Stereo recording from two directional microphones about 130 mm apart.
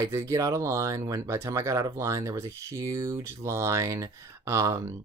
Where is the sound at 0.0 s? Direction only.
25° right (ahead or behind).